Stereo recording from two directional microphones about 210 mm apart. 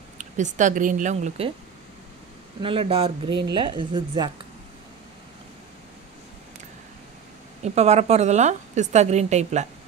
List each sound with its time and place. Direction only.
0.2 s a woman's voice: 35° right (ahead or behind)
2.6 s a woman's voice: 25° right (ahead or behind)
7.6 s a woman's voice: 30° right (ahead or behind)